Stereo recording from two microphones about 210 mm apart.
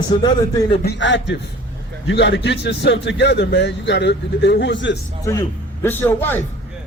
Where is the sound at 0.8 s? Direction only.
55° left (ahead or behind).